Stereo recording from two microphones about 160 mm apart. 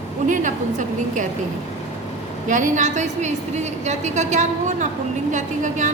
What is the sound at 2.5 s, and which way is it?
A woman's voice, 55° right (ahead or behind).